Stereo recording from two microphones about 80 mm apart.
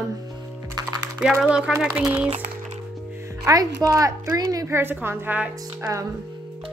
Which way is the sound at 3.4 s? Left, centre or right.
Right.